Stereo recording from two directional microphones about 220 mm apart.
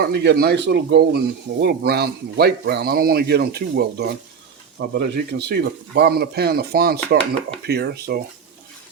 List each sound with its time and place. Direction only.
0.0 s speech: 50° right (ahead or behind)